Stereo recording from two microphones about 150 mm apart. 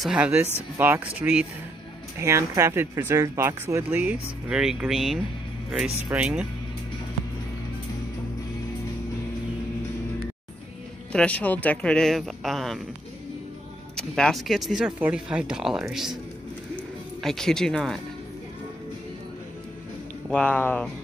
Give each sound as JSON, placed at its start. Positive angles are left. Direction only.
{"t": 0.0, "sound": "speech", "side_deg": -10}
{"t": 2.1, "sound": "speech", "side_deg": -20}
{"t": 11.1, "sound": "speech", "side_deg": 5}
{"t": 13.9, "sound": "speech", "side_deg": 5}
{"t": 16.7, "sound": "music", "side_deg": 5}
{"t": 20.2, "sound": "speech", "side_deg": 5}